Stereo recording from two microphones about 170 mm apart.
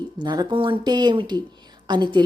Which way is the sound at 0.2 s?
25° right (ahead or behind).